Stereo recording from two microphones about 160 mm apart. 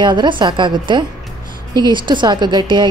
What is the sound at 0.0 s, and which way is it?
A woman's voice, 30° right (ahead or behind).